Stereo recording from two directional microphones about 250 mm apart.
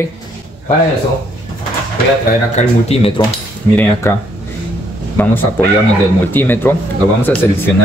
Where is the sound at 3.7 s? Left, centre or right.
Centre.